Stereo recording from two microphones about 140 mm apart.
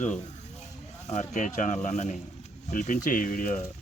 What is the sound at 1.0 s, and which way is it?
Speech, 55° left (ahead or behind).